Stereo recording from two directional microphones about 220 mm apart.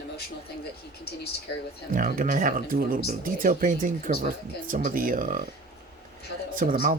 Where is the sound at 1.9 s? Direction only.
40° right (ahead or behind).